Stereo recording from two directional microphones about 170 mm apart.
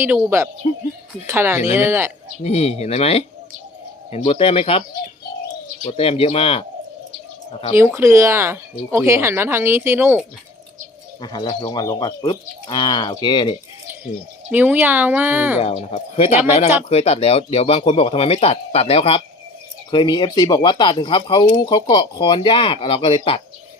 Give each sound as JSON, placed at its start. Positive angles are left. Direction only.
{"t": 0.0, "sound": "speech", "side_deg": -15}
{"t": 2.4, "sound": "speech", "side_deg": 40}
{"t": 5.8, "sound": "speech", "side_deg": 35}
{"t": 7.8, "sound": "speech", "side_deg": -15}
{"t": 11.2, "sound": "speech", "side_deg": 25}
{"t": 14.5, "sound": "speech", "side_deg": -10}
{"t": 15.6, "sound": "speech", "side_deg": 40}